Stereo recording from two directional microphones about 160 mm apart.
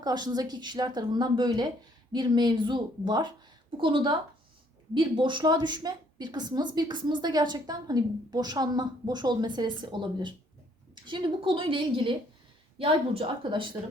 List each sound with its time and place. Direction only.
0.0 s a woman's voice: 25° right (ahead or behind)